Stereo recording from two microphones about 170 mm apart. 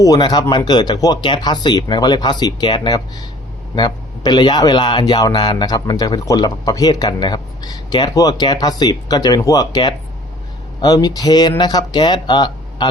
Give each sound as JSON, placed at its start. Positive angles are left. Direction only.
{"t": 0.0, "sound": "a man's voice", "side_deg": 20}